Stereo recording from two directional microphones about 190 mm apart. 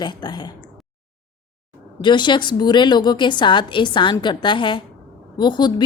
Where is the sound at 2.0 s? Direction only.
25° left (ahead or behind).